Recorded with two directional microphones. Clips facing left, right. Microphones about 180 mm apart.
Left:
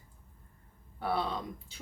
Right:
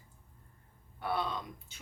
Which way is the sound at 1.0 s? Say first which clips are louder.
Left 2 dB; 30° left (ahead or behind).